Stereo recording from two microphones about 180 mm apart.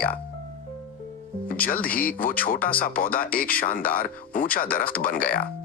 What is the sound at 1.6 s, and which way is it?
Speech, 50° left (ahead or behind).